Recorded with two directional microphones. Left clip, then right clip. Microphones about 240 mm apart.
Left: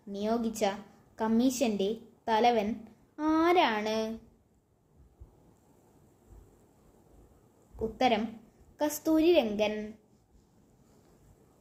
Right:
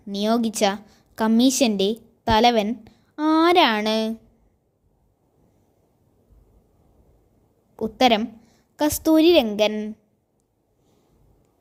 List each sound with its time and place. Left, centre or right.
0.1 s a woman's voice: right
7.8 s a woman's voice: right